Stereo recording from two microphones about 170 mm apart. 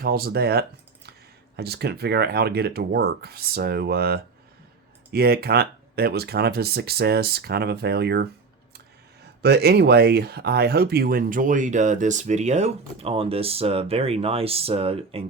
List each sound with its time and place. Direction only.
0.0 s speech: 65° right (ahead or behind)
9.4 s speech: 75° right (ahead or behind); by 15.2 s 35° right (ahead or behind)